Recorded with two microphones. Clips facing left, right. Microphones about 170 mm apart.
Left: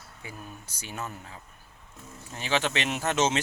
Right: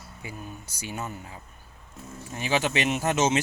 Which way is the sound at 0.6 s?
10° right (ahead or behind).